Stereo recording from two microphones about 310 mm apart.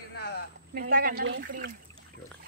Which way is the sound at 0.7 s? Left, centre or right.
Right.